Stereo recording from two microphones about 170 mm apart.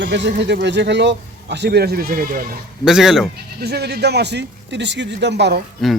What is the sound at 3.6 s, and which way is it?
A man's voice, 70° right (ahead or behind).